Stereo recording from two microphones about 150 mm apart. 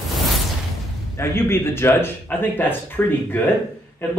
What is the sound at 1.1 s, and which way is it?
Speech, 15° left (ahead or behind).